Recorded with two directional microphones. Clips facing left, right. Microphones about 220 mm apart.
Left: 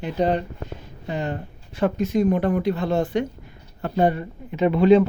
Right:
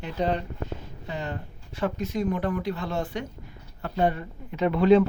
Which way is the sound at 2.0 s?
20° left (ahead or behind).